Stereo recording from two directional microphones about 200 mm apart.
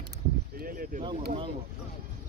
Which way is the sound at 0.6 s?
45° right (ahead or behind).